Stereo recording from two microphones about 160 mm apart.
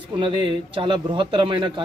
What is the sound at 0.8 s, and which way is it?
Speech, 30° right (ahead or behind).